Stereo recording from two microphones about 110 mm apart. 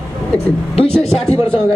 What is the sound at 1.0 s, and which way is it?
Speech, 5° left (ahead or behind).